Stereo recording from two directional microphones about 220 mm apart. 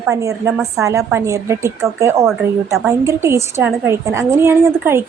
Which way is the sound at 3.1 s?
10° right (ahead or behind).